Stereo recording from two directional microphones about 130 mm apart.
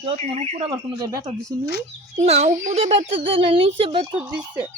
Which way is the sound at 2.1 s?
55° right (ahead or behind).